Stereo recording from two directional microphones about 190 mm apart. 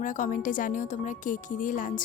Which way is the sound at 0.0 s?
45° left (ahead or behind).